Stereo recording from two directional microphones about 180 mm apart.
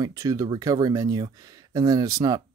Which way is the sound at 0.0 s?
20° right (ahead or behind).